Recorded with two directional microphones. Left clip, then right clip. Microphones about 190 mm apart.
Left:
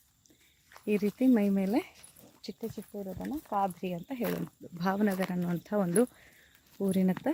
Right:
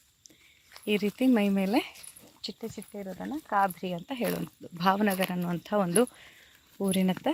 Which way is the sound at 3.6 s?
5° right (ahead or behind).